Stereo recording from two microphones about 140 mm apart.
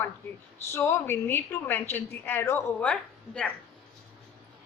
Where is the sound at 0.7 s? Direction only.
20° left (ahead or behind).